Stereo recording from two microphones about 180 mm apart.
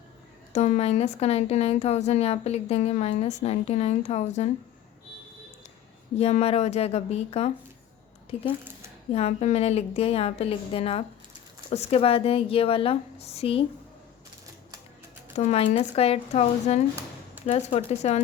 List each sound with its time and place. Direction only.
0.5 s a woman's voice: 40° left (ahead or behind)
6.1 s a woman's voice: 35° left (ahead or behind)
9.1 s a woman's voice: 35° left (ahead or behind)
15.4 s a woman's voice: 40° left (ahead or behind)